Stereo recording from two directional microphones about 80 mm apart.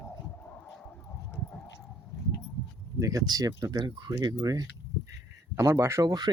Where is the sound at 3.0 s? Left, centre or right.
Right.